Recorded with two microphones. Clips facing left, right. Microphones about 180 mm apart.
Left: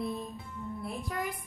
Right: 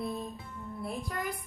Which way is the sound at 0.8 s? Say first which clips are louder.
Right 1 dB; centre (ahead or behind).